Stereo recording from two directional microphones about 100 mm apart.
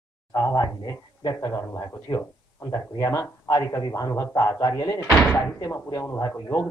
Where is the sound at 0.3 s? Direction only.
40° left (ahead or behind).